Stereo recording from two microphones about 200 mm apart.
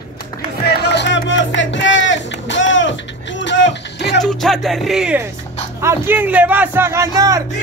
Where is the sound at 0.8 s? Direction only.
60° left (ahead or behind).